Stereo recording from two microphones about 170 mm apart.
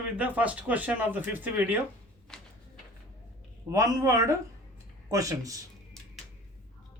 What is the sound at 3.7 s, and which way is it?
Speech, 20° right (ahead or behind).